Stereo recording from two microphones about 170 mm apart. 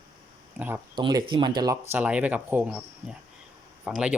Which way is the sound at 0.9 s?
30° right (ahead or behind).